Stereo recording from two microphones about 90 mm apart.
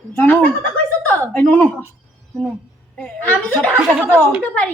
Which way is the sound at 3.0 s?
20° left (ahead or behind).